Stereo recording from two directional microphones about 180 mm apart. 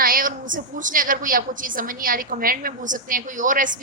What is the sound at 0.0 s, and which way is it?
A woman's voice, 50° right (ahead or behind).